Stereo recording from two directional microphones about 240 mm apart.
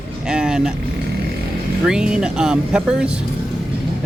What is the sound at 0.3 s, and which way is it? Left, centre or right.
Vehicle, centre.